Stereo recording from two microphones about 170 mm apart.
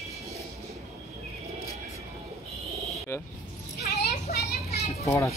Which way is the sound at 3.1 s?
15° left (ahead or behind).